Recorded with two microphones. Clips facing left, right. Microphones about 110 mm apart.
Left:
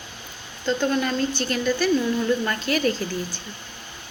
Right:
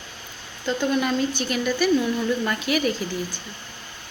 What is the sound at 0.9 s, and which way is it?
Speech, 15° right (ahead or behind).